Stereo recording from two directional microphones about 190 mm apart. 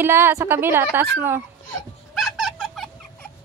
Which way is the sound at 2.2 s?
Centre (ahead or behind).